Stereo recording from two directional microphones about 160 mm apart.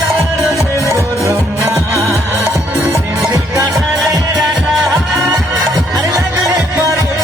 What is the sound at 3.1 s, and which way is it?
Music, centre (ahead or behind).